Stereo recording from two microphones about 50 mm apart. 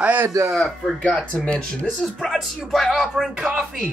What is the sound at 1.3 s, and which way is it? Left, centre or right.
Speech, left.